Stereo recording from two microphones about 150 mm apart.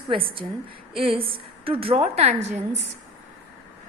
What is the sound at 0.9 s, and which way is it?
A woman's voice, 35° right (ahead or behind).